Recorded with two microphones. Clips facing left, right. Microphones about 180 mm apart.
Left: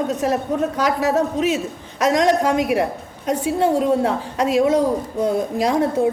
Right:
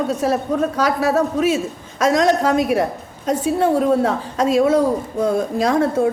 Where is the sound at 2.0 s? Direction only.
15° left (ahead or behind).